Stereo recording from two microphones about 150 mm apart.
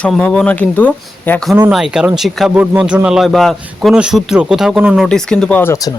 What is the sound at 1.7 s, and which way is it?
Speech, 5° right (ahead or behind).